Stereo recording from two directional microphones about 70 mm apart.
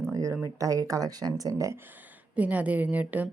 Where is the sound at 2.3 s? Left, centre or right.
Right.